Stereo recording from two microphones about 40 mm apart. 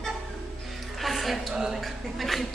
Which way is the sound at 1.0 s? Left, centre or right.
Centre.